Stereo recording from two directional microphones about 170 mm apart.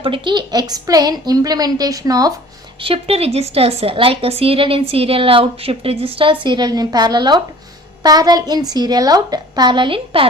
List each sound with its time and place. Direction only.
0.0 s a woman's voice: 30° right (ahead or behind)
2.8 s a woman's voice: 35° right (ahead or behind)